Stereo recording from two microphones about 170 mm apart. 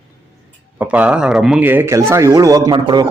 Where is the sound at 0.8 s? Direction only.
10° right (ahead or behind).